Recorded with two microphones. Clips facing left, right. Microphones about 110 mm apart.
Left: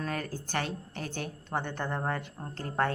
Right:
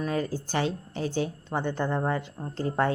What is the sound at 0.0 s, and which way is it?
A woman's voice, 15° right (ahead or behind).